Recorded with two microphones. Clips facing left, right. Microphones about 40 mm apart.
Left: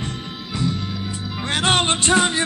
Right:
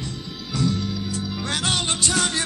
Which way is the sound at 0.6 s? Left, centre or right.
Left.